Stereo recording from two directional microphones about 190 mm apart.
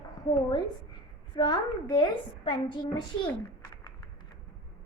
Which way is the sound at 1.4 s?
20° left (ahead or behind).